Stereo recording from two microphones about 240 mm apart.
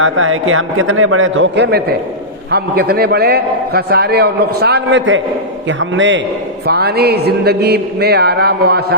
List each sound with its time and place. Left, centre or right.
0.0 s a man's voice: right